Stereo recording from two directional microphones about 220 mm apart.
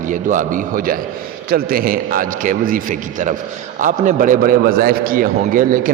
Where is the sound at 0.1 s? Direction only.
35° right (ahead or behind).